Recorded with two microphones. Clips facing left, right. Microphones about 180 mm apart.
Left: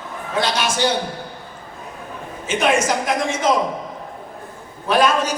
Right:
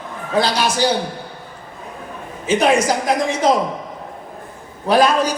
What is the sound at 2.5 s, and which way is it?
A woman's voice, 35° right (ahead or behind).